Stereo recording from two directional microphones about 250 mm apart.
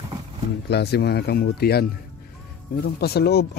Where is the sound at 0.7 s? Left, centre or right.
Left.